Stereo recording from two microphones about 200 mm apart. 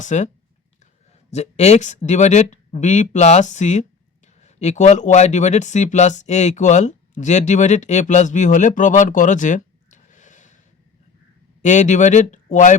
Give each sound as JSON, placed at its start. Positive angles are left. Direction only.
{"t": 0.0, "sound": "speech", "side_deg": 35}
{"t": 1.3, "sound": "speech", "side_deg": 35}
{"t": 11.6, "sound": "speech", "side_deg": 40}